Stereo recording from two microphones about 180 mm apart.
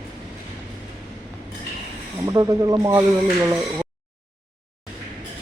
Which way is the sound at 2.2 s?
20° right (ahead or behind).